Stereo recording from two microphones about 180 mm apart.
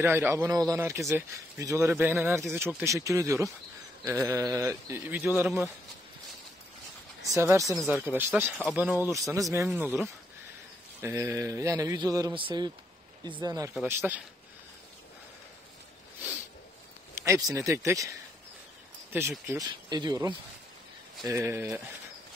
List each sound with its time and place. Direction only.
0.0 s speech: 15° right (ahead or behind)
7.2 s speech: 15° right (ahead or behind)
13.7 s speech: 10° right (ahead or behind)
17.1 s speech: 15° right (ahead or behind)
19.4 s speech: 20° right (ahead or behind)